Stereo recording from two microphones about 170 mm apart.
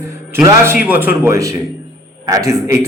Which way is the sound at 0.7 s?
10° right (ahead or behind).